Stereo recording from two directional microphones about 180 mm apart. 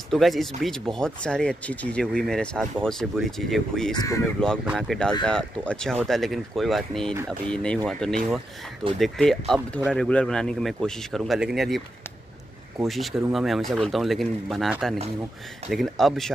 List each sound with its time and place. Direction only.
0.1 s speech: centre (ahead or behind)
3.9 s speech: 20° left (ahead or behind)
4.6 s speech: centre (ahead or behind)
12.8 s speech: centre (ahead or behind)